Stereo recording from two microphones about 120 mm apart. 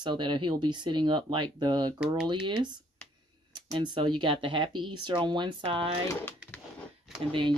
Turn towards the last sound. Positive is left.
turn(degrees=-45)  # may be behind; listen again after turning